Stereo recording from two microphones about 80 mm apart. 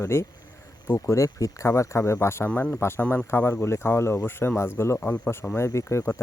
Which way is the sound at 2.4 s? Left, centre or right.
Centre.